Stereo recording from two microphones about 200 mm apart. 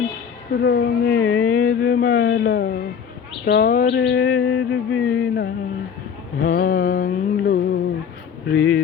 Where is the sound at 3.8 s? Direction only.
65° left (ahead or behind); by 4.6 s 50° left (ahead or behind).